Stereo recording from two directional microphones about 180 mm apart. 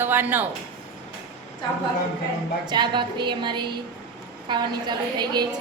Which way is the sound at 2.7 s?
25° right (ahead or behind).